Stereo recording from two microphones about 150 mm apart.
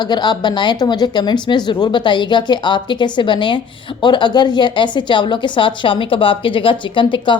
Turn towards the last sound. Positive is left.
turn(degrees=30)  # may be behind; listen again after turning